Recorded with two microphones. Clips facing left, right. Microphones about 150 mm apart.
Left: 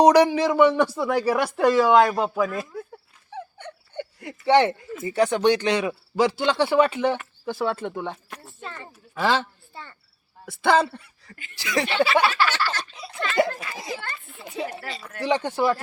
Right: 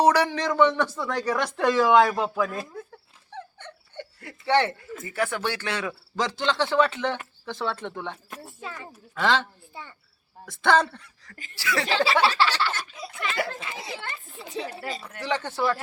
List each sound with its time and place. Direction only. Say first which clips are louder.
0.0 s speech: left 5 dB; 15° left (ahead or behind)
3.3 s a sound: left 4 dB; 15° left (ahead or behind)
5.0 s speech: left 9 dB; 20° left (ahead or behind)
8.6 s speech: left 1 dB; 5° right (ahead or behind)
9.1 s speech: left 1 dB; 10° left (ahead or behind)
12.2 s a sound: even; 30° right (ahead or behind)
13.5 s a child's voice: left 3 dB; 20° right (ahead or behind)
14.4 s speech: left 1 dB; 10° left (ahead or behind)